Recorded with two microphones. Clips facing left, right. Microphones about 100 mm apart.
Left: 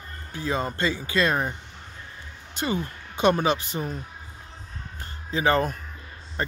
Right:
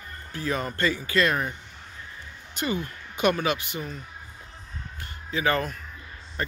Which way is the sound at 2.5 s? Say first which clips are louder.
Left 1 dB; 25° left (ahead or behind).